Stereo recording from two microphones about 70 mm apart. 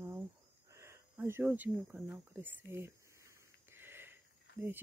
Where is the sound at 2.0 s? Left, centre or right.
Right.